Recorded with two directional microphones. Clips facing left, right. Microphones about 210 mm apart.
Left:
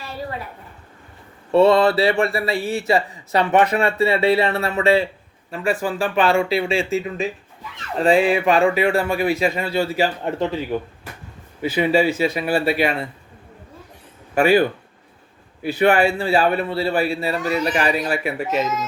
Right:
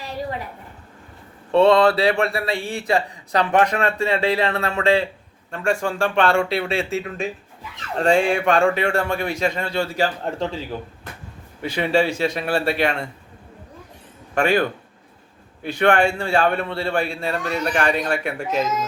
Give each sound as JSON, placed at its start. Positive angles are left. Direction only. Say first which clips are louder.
{"t": 0.0, "sound": "a sound", "louder": "right 2 dB", "side_deg": -15}
{"t": 1.5, "sound": "speech", "louder": "left 1 dB", "side_deg": 5}
{"t": 11.6, "sound": "speech", "louder": "left 2 dB", "side_deg": 5}
{"t": 14.3, "sound": "speech", "louder": "left 4 dB", "side_deg": 5}
{"t": 15.6, "sound": "speech", "louder": "left 1 dB", "side_deg": 5}